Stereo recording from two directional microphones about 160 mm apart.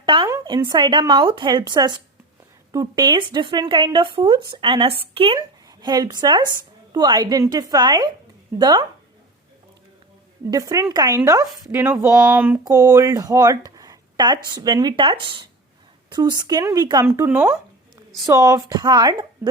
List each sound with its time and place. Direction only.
0.0 s a sound: 30° right (ahead or behind)
0.7 s speech: 30° right (ahead or behind)
5.6 s a woman's voice: 25° right (ahead or behind)
10.5 s speech: 20° right (ahead or behind)
12.6 s speech: 20° right (ahead or behind)
18.2 s speech: 25° right (ahead or behind)
19.4 s a sound: 15° right (ahead or behind)